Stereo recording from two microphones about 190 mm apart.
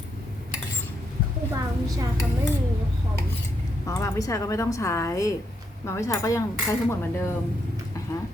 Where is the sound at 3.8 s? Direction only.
15° left (ahead or behind).